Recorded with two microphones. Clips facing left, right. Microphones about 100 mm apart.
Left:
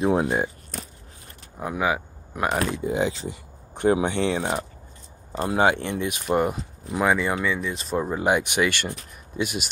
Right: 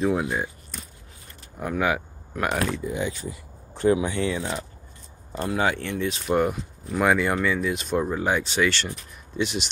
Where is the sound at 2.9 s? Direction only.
90° left.